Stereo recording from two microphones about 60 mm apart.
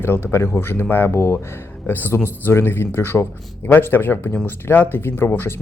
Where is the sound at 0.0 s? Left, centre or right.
Left.